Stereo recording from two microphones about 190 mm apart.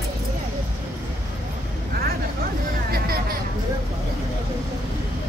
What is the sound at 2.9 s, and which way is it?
Music, 50° right (ahead or behind).